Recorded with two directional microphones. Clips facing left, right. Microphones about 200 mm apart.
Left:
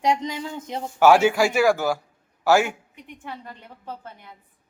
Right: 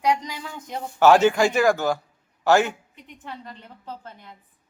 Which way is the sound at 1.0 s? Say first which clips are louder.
Even; 10° left (ahead or behind).